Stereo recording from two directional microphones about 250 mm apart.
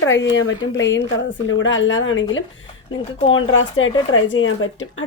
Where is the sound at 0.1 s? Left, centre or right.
Left.